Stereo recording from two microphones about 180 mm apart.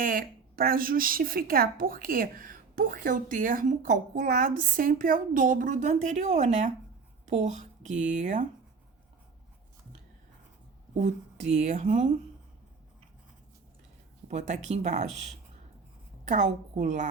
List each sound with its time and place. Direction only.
0.0 s speech: 50° right (ahead or behind)
11.0 s speech: 40° right (ahead or behind)
14.3 s speech: 40° right (ahead or behind)
16.2 s a woman's voice: 40° right (ahead or behind)